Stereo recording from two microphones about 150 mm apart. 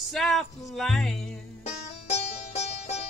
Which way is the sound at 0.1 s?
Centre (ahead or behind).